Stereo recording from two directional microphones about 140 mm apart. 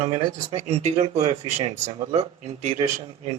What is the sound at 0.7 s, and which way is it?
Speech, 50° right (ahead or behind).